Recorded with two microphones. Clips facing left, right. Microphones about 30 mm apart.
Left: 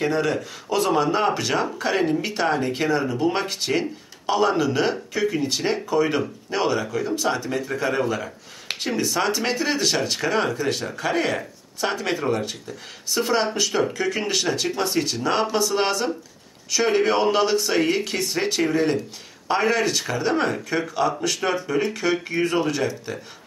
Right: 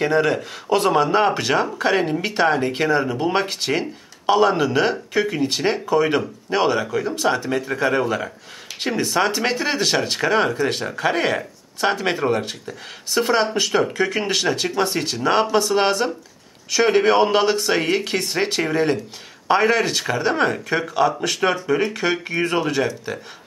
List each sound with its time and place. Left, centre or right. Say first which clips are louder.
0.0 s speech: right 4 dB; right
9.1 s speech: right 5 dB; right
21.4 s speech: right 7 dB; right